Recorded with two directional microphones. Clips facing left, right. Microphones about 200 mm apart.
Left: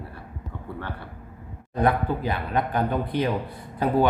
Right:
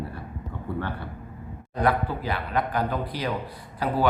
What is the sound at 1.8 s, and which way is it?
Speech, 20° left (ahead or behind).